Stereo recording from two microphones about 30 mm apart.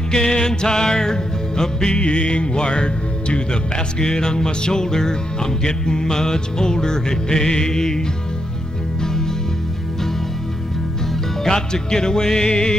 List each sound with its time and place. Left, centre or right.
0.1 s speech: left
2.0 s speech: left; by 8.0 s centre
9.0 s music: centre
11.4 s speech: left